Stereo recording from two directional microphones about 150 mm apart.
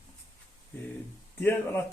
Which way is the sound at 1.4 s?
15° left (ahead or behind).